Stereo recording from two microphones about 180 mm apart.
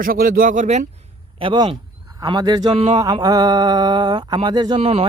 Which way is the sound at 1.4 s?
25° right (ahead or behind).